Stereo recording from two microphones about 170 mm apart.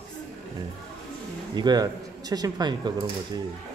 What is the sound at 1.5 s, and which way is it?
A man's voice, 25° right (ahead or behind).